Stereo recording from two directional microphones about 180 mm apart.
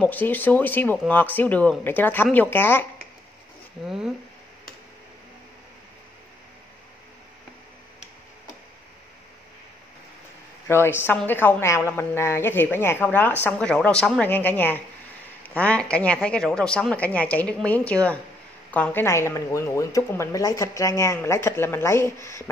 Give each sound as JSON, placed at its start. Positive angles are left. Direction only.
{"t": 0.0, "sound": "speech", "side_deg": 10}
{"t": 3.8, "sound": "speech", "side_deg": -5}
{"t": 10.7, "sound": "speech", "side_deg": 15}